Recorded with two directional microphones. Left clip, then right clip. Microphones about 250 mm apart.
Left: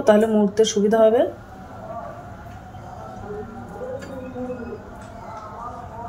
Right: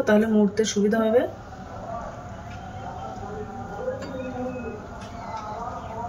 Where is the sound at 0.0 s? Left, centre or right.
Centre.